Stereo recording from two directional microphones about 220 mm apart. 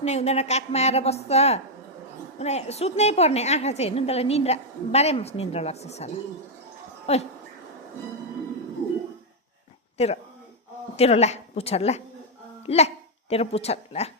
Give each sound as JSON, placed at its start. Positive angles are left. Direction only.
{"t": 0.0, "sound": "a woman's voice", "side_deg": 30}
{"t": 10.0, "sound": "a woman's voice", "side_deg": 30}